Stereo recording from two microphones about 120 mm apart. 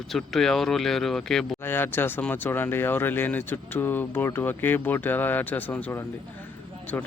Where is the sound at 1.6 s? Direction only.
20° left (ahead or behind).